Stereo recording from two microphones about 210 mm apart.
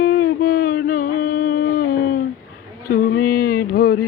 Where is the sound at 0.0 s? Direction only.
45° left (ahead or behind).